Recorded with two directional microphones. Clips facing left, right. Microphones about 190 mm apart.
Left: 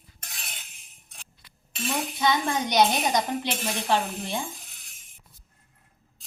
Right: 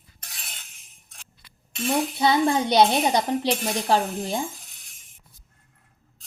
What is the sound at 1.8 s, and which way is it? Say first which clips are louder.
Speech: right 4 dB; 35° right (ahead or behind).